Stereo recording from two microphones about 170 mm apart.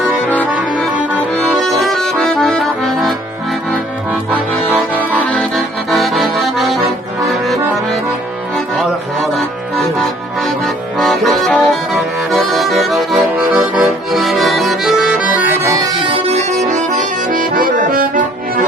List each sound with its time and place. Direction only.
1.3 s accordion: 5° left (ahead or behind)
4.9 s accordion: 10° left (ahead or behind)
10.9 s accordion: centre (ahead or behind)
15.4 s accordion: 15° right (ahead or behind)
16.0 s accordion: 40° right (ahead or behind)